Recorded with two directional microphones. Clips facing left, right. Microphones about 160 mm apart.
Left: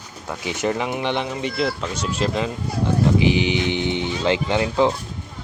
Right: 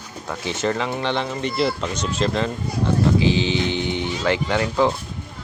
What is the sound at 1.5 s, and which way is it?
Speech, centre (ahead or behind).